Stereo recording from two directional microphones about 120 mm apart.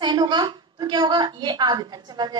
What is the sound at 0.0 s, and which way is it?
A woman's voice, 40° right (ahead or behind).